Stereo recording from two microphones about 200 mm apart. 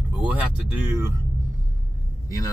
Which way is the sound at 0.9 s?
15° right (ahead or behind).